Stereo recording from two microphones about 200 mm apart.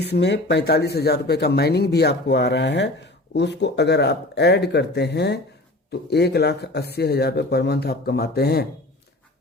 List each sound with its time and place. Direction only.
0.1 s speech: 55° left (ahead or behind)